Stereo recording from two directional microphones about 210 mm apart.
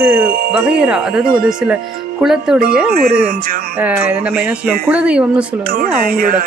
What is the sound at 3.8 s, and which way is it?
Speech, 10° right (ahead or behind).